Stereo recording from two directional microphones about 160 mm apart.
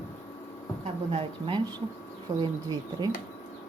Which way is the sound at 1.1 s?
35° right (ahead or behind).